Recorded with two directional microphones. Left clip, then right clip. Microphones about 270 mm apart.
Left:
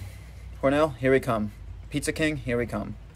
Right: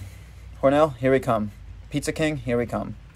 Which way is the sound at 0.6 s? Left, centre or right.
Centre.